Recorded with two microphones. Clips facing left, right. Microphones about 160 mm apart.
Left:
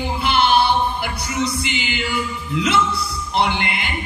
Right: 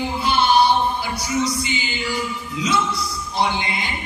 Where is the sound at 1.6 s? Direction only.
70° left (ahead or behind).